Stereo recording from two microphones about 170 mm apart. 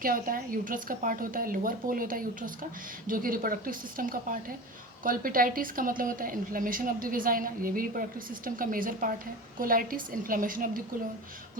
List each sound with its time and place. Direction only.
0.0 s a woman's voice: 55° right (ahead or behind)